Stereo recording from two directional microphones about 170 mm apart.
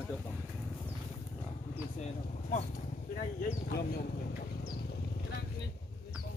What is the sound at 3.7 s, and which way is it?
Speech, 65° left (ahead or behind).